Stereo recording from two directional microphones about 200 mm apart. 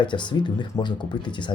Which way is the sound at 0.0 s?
25° left (ahead or behind).